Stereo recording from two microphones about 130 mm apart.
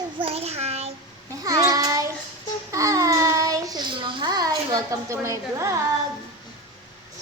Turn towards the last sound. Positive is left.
turn(degrees=-25)  # may be behind; listen again after turning